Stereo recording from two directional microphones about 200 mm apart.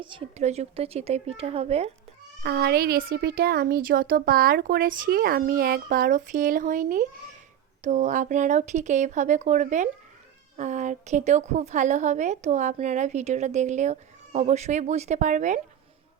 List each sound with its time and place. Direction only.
0.0 s a woman's voice: 25° right (ahead or behind)
2.4 s a woman's voice: 55° right (ahead or behind); by 15.6 s 40° right (ahead or behind)